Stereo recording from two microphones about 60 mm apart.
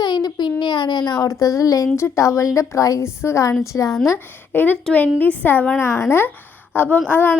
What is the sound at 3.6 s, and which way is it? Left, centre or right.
Speech, left.